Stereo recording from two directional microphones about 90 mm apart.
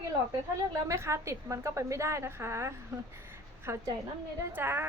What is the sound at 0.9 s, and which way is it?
A woman's voice, 30° right (ahead or behind).